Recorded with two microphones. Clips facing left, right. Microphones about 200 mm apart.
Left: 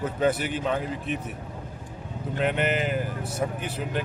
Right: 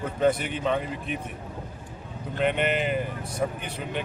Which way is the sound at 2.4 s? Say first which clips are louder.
Right 1 dB; 5° left (ahead or behind).